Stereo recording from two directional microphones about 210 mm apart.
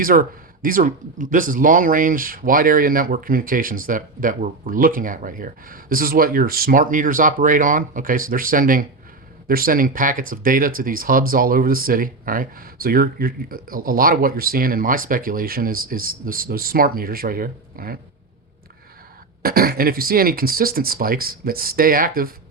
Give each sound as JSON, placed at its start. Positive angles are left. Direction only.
{"t": 0.0, "sound": "speech", "side_deg": -40}
{"t": 19.4, "sound": "speech", "side_deg": -45}